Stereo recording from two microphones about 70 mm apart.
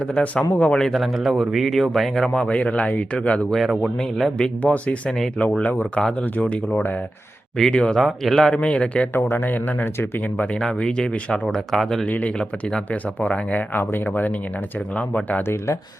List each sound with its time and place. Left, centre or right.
0.0 s speech: centre
0.9 s speech: centre
3.5 s speech: centre
4.6 s speech: left
5.0 s speech: centre
5.4 s speech: centre
9.1 s speech: left; by 12.0 s centre
12.0 s speech: left
15.4 s speech: left